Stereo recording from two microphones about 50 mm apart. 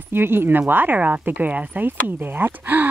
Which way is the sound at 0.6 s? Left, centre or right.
Right.